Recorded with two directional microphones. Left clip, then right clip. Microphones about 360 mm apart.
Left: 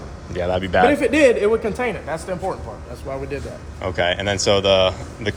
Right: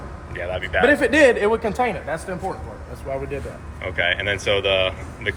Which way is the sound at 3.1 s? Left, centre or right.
Left.